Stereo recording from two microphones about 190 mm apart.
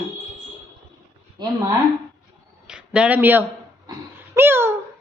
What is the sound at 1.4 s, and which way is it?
Speech, 20° right (ahead or behind).